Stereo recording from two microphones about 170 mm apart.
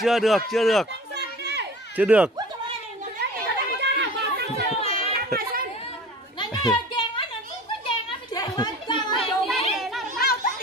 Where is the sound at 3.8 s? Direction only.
80° right.